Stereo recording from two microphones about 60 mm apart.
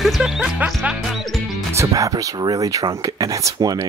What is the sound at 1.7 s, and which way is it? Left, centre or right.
Speech, right.